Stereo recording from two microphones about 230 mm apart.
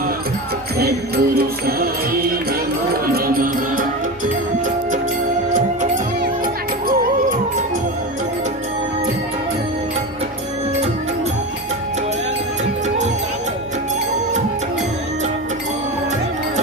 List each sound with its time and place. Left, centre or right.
0.8 s music: right
5.5 s music: right